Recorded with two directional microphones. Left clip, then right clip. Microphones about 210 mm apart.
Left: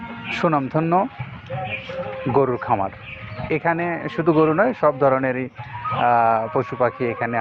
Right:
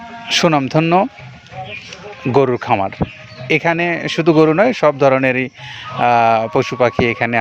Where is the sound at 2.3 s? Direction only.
70° right (ahead or behind).